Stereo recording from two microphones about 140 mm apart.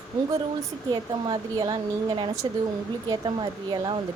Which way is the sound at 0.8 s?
30° right (ahead or behind).